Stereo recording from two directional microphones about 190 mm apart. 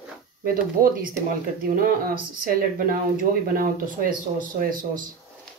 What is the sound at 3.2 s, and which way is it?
Speech, 50° right (ahead or behind).